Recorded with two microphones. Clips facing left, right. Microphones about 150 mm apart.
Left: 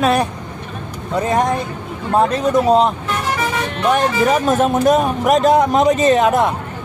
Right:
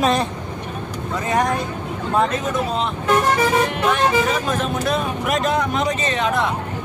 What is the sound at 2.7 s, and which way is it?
Speech, 40° left (ahead or behind).